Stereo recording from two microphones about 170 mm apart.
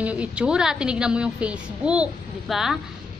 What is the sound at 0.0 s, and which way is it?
A woman's voice, 5° right (ahead or behind).